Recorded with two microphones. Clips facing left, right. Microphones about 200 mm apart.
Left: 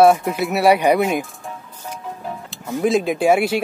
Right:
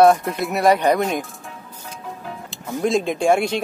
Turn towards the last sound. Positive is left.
turn(degrees=5)  # may be behind; listen again after turning